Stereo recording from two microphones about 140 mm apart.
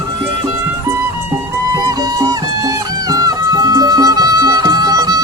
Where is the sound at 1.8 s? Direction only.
25° right (ahead or behind).